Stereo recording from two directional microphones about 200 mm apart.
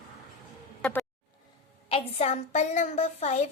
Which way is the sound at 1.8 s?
30° left (ahead or behind).